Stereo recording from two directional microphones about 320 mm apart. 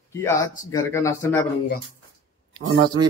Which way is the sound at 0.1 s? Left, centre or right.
Centre.